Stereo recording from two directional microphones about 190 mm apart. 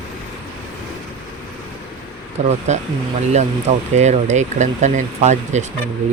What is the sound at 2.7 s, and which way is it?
Speech, 35° right (ahead or behind).